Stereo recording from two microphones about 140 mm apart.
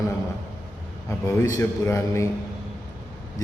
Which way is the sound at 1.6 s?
20° left (ahead or behind).